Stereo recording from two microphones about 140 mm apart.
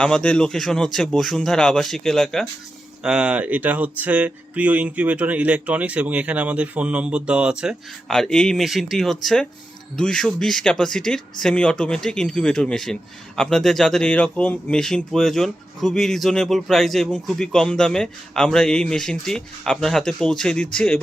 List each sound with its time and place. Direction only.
0.0 s speech: 5° left (ahead or behind)